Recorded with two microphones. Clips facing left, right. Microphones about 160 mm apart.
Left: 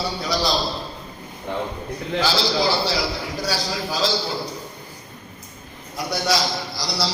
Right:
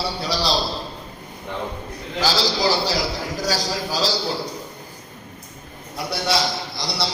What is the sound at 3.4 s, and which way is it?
Speech, 40° right (ahead or behind).